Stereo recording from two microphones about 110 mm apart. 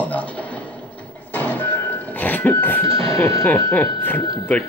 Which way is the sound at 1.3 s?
15° left (ahead or behind).